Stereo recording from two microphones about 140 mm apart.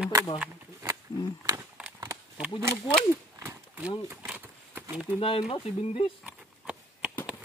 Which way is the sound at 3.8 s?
10° right (ahead or behind).